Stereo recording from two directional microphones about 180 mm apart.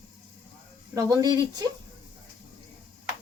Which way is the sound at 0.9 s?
20° right (ahead or behind).